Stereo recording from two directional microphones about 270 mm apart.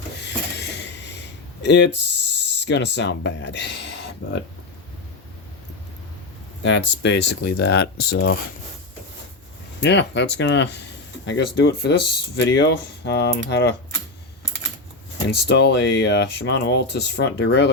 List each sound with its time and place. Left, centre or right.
0.5 s a sound: left
1.6 s speech: left
6.6 s speech: left
9.8 s speech: left
15.4 s speech: left